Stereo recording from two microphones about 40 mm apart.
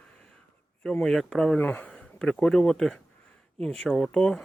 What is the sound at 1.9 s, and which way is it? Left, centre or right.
Speech, centre.